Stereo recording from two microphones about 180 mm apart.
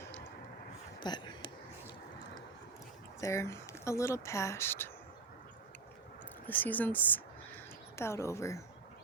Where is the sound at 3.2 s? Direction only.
15° left (ahead or behind).